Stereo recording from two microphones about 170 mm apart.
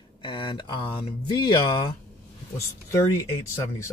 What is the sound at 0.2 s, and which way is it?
Speech, 30° left (ahead or behind).